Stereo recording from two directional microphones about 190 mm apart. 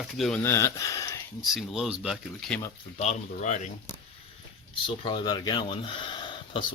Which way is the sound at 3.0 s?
40° left (ahead or behind).